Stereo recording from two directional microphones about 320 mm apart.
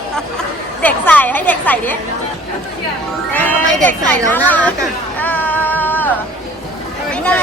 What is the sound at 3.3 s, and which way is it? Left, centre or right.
Speech, centre.